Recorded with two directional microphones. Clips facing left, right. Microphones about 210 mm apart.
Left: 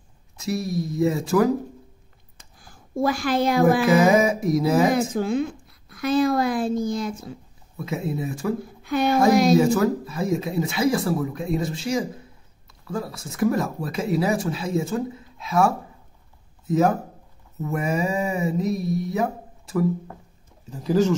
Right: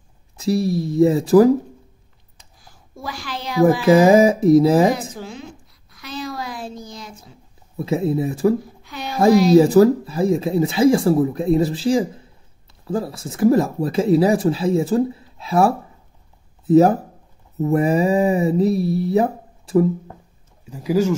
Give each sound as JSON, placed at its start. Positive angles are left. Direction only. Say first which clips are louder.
{"t": 0.4, "sound": "speech", "louder": "right 6 dB", "side_deg": -30}
{"t": 2.3, "sound": "a sound", "louder": "left 1 dB", "side_deg": 50}
{"t": 3.8, "sound": "speech", "louder": "right 5 dB", "side_deg": -30}
{"t": 5.1, "sound": "a woman's voice", "louder": "left 10 dB", "side_deg": 55}
{"t": 7.7, "sound": "speech", "louder": "right 8 dB", "side_deg": -30}
{"t": 8.8, "sound": "speech", "louder": "left 10 dB", "side_deg": 55}
{"t": 9.2, "sound": "speech", "louder": "right 6 dB", "side_deg": -35}
{"t": 20.7, "sound": "speech", "louder": "right 2 dB", "side_deg": -10}